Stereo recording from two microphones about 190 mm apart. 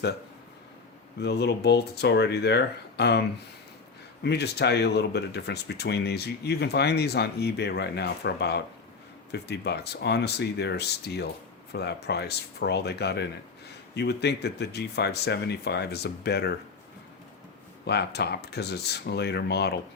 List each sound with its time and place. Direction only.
1.2 s speech: 60° left (ahead or behind)
17.8 s speech: 60° left (ahead or behind)